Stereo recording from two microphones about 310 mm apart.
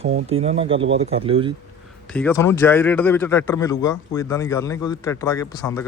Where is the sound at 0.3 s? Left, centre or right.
Centre.